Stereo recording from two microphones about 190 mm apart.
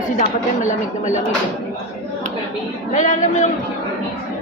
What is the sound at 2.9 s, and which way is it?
Speech, 40° left (ahead or behind).